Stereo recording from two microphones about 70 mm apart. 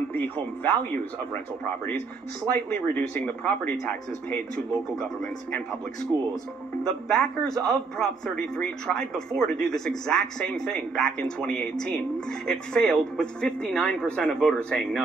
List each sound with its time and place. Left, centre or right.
0.1 s speech: left
2.5 s a man's voice: centre
7.1 s a man's voice: centre